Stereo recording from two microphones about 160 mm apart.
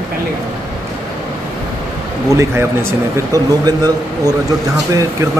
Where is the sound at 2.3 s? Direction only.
15° right (ahead or behind).